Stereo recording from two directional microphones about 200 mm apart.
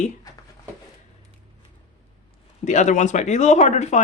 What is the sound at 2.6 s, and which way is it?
Speech, 35° left (ahead or behind).